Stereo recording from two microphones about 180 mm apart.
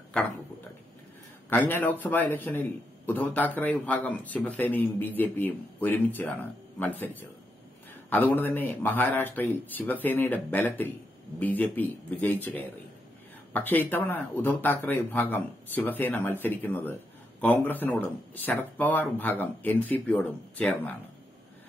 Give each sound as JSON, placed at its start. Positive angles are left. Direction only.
{"t": 0.2, "sound": "a man's voice", "side_deg": 5}
{"t": 1.5, "sound": "a man's voice", "side_deg": 10}